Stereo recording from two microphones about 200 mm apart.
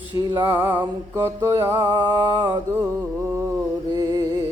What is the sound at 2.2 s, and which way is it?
Mantra, 20° right (ahead or behind).